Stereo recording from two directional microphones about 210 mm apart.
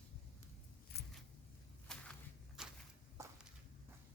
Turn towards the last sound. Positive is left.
turn(degrees=-15)  # may be behind; listen again after turning